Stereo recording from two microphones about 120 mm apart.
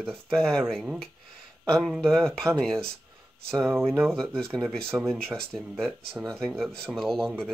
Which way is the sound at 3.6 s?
20° right (ahead or behind).